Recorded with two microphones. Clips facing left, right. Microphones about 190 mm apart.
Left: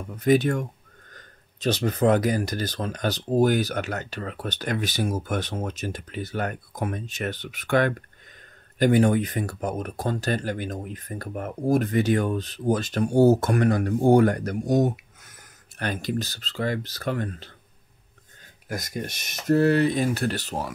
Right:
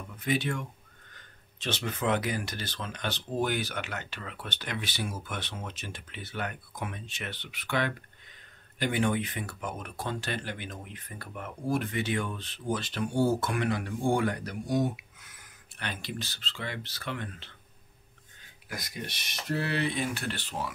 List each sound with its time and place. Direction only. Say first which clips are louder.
0.1 s speech: left 10 dB; 40° left (ahead or behind)
18.7 s speech: left 8 dB; 45° left (ahead or behind)